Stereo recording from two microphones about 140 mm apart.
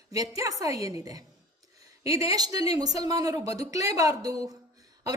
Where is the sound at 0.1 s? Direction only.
25° right (ahead or behind).